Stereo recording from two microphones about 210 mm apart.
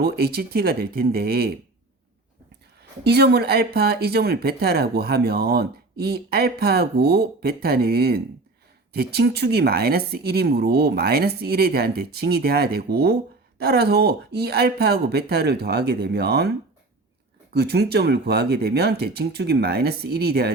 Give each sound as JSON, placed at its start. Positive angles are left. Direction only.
{"t": 0.0, "sound": "speech", "side_deg": -45}
{"t": 3.0, "sound": "speech", "side_deg": -50}
{"t": 17.5, "sound": "speech", "side_deg": -50}